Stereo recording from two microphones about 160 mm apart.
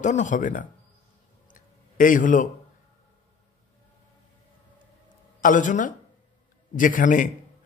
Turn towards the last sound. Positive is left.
turn(degrees=55)  # may be behind; listen again after turning